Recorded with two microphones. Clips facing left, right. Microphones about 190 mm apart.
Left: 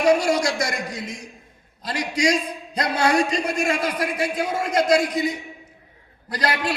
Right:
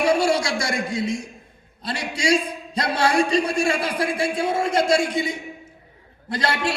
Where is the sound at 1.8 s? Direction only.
30° right (ahead or behind).